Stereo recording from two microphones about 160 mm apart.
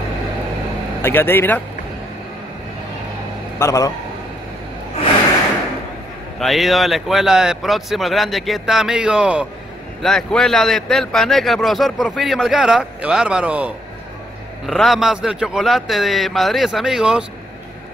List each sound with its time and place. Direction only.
1.0 s speech: 15° left (ahead or behind)
3.5 s a man's voice: 20° left (ahead or behind)
6.4 s a man's voice: centre (ahead or behind)